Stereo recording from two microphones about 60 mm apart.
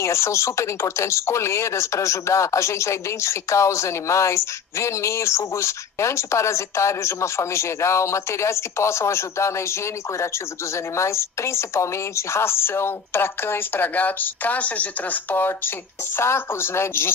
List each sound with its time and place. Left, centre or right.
0.0 s a woman's voice: left